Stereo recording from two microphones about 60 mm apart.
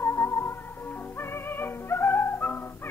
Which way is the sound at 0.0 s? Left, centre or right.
Left.